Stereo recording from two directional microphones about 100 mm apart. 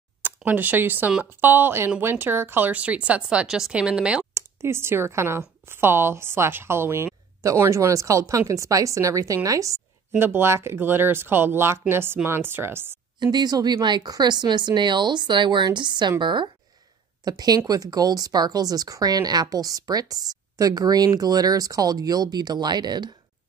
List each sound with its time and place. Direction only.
0.5 s speech: 15° right (ahead or behind)
4.3 s speech: 30° right (ahead or behind)
10.1 s speech: 20° right (ahead or behind)
13.2 s speech: 45° right (ahead or behind)
17.2 s a woman's voice: 40° right (ahead or behind)